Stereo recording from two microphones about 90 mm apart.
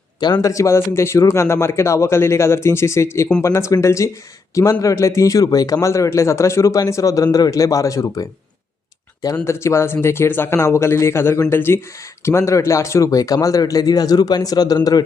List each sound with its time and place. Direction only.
0.2 s speech: 50° left (ahead or behind)
0.5 s a man's voice: 30° left (ahead or behind)
9.4 s a man's voice: 30° left (ahead or behind)